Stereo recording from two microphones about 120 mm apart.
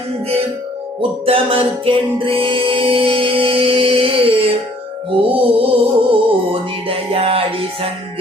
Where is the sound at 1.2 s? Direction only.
50° right (ahead or behind).